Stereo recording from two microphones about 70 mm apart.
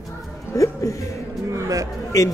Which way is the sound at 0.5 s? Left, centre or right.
Left.